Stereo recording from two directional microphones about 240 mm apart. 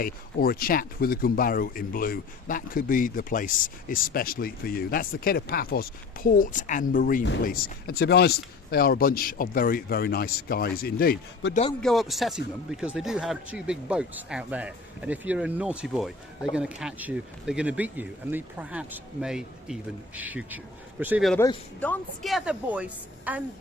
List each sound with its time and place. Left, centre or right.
0.0 s speech: left
11.8 s speech: centre
21.3 s speech: centre